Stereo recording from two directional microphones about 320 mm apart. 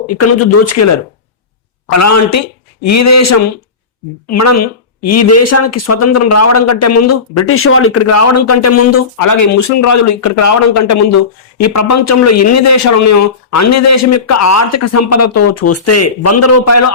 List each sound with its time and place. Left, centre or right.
0.1 s a woman's voice: left
1.9 s a woman's voice: left
9.2 s speech: left